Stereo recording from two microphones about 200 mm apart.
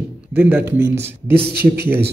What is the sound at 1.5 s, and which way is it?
Speech, 50° right (ahead or behind).